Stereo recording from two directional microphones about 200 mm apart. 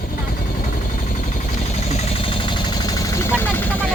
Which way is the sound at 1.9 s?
30° left (ahead or behind).